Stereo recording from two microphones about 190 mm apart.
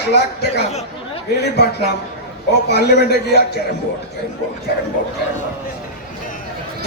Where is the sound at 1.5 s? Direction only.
60° left (ahead or behind).